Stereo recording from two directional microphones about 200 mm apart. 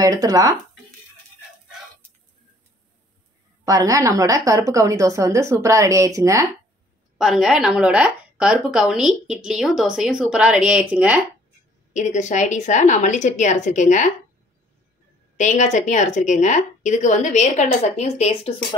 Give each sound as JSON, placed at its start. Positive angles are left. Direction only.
{"t": 0.0, "sound": "speech", "side_deg": -20}
{"t": 3.6, "sound": "a woman's voice", "side_deg": -15}
{"t": 7.2, "sound": "a woman's voice", "side_deg": 0}
{"t": 11.9, "sound": "a woman's voice", "side_deg": 35}
{"t": 15.3, "sound": "a woman's voice", "side_deg": 35}